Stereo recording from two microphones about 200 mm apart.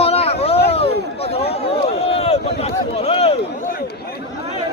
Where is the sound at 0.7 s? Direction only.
30° left (ahead or behind).